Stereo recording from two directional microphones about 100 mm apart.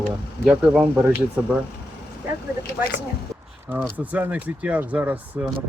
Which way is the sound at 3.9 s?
15° right (ahead or behind).